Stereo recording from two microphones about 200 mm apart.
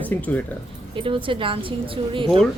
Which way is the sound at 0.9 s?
25° right (ahead or behind).